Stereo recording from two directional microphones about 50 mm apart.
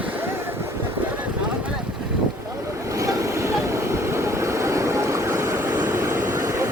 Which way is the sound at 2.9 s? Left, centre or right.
Right.